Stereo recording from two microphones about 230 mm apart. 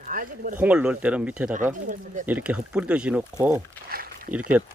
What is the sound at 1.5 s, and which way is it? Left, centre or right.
Speech, right.